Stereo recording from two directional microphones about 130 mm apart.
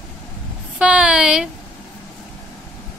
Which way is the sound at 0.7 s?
10° right (ahead or behind).